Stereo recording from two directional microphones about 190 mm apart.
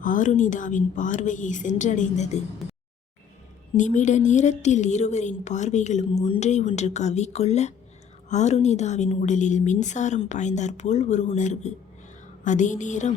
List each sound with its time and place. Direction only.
0.0 s a woman's voice: 45° left (ahead or behind)
3.8 s a woman's voice: 40° left (ahead or behind)